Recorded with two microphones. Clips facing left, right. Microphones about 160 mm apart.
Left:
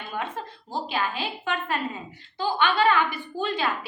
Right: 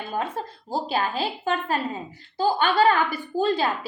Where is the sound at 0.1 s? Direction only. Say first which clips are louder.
Right 3 dB; 40° right (ahead or behind).